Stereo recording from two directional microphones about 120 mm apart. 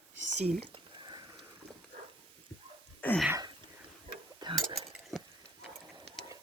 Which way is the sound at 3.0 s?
15° left (ahead or behind).